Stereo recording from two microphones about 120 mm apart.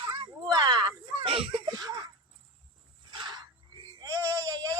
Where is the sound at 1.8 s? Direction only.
30° right (ahead or behind).